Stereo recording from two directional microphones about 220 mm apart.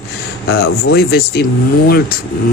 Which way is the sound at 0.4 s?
50° left (ahead or behind).